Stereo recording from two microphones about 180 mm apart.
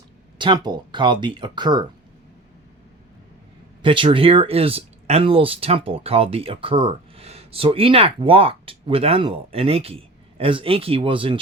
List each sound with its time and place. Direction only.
0.3 s speech: 25° right (ahead or behind)
3.8 s speech: 30° right (ahead or behind)